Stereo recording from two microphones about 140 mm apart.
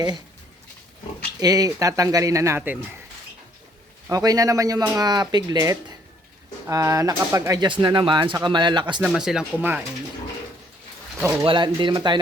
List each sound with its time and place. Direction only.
1.4 s speech: 25° right (ahead or behind)
4.1 s speech: 25° right (ahead or behind)
9.0 s speech: 5° right (ahead or behind)
11.4 s speech: 35° right (ahead or behind)